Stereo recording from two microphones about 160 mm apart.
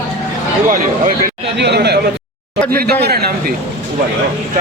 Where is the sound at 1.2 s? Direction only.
90° right.